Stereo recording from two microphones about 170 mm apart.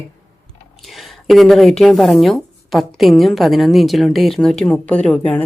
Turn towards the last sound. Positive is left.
turn(degrees=10)  # may be behind; listen again after turning